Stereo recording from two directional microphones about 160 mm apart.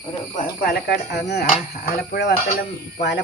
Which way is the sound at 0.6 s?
90° left.